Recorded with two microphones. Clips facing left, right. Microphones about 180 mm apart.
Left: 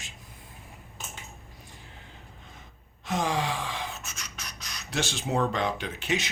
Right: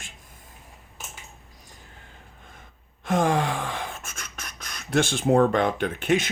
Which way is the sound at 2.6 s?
55° right (ahead or behind).